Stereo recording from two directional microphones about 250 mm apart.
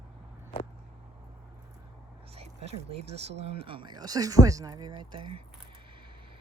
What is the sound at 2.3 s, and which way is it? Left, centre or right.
Speech, right.